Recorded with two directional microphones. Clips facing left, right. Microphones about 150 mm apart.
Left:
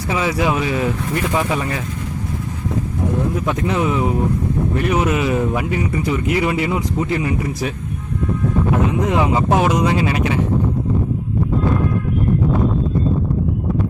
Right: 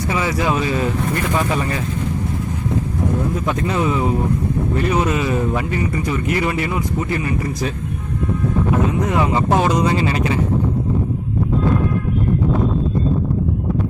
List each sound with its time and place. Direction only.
0.1 s speech: 10° left (ahead or behind)
3.7 s speech: 10° left (ahead or behind)
9.0 s speech: 15° left (ahead or behind)